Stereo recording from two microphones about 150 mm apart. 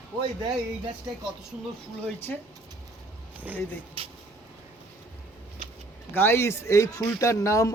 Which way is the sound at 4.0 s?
35° right (ahead or behind).